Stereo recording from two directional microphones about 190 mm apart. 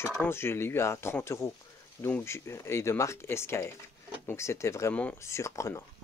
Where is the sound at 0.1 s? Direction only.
10° left (ahead or behind).